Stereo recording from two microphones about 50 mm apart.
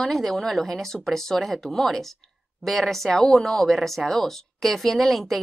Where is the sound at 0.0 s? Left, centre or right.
Centre.